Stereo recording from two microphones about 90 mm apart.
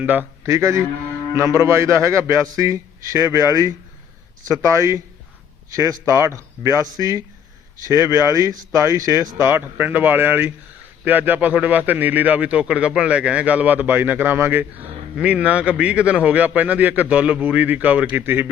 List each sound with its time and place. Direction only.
0.0 s a man's voice: 20° right (ahead or behind)
0.4 s a man's voice: 35° right (ahead or behind)
9.5 s a man's voice: 20° right (ahead or behind)
15.1 s a man's voice: 15° right (ahead or behind)